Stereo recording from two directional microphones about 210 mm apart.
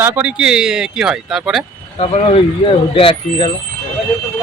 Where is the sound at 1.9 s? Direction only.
30° left (ahead or behind).